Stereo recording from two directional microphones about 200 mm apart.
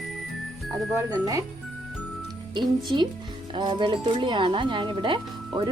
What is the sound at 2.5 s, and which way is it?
Speech, 20° right (ahead or behind).